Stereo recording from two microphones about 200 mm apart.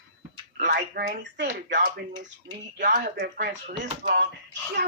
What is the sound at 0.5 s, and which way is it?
Speech, 50° right (ahead or behind).